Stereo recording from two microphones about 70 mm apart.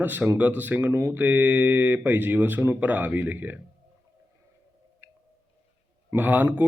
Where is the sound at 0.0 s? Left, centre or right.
Right.